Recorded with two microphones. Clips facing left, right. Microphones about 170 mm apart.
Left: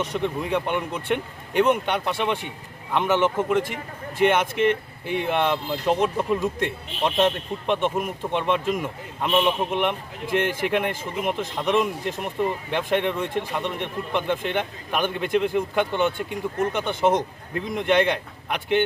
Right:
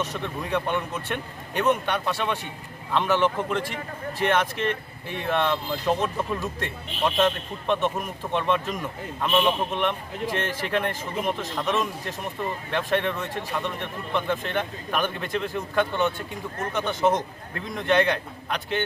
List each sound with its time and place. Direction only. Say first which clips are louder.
0.2 s speech: left 3 dB; 15° left (ahead or behind)